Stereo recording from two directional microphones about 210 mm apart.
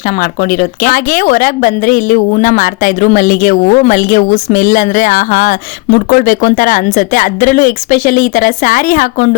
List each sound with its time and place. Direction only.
0.6 s speech: 40° left (ahead or behind)